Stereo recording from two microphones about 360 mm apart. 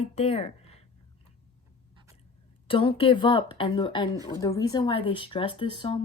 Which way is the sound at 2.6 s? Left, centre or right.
Centre.